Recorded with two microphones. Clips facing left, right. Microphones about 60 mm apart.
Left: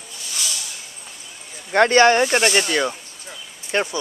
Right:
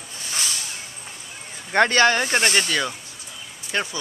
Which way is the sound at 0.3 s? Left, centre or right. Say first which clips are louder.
Right 1 dB; right.